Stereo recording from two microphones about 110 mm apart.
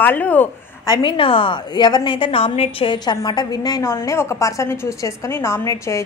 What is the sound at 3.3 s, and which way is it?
A woman's voice, 40° left (ahead or behind).